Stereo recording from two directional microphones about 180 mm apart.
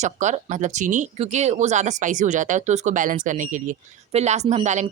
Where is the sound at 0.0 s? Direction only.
40° right (ahead or behind).